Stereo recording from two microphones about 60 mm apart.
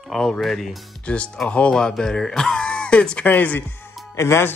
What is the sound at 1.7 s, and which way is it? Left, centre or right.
Speech, centre.